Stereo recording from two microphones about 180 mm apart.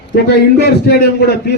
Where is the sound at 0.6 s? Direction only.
60° left (ahead or behind).